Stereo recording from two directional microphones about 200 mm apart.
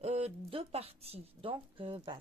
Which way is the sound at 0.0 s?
30° right (ahead or behind).